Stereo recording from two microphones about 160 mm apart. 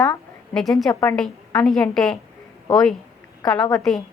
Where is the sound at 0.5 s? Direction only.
Centre (ahead or behind).